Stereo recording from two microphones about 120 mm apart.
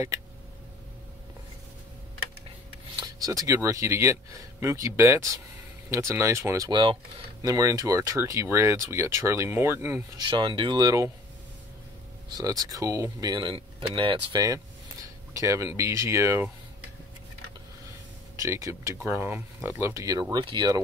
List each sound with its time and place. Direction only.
3.0 s speech: 30° right (ahead or behind)
6.7 s speech: 45° right (ahead or behind)
7.4 s speech: 30° right (ahead or behind)
10.1 s speech: 40° right (ahead or behind)
12.4 s speech: 30° right (ahead or behind)
13.3 s speech: 40° right (ahead or behind)
14.3 s speech: 30° right (ahead or behind)
18.3 s speech: 25° right (ahead or behind)